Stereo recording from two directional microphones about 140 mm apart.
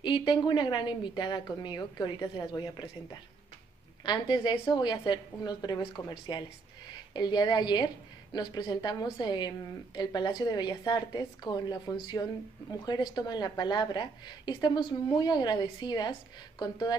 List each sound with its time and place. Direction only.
0.0 s a woman's voice: 35° left (ahead or behind)